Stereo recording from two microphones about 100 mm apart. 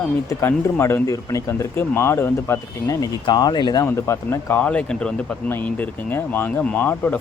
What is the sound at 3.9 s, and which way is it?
Speech, 30° left (ahead or behind).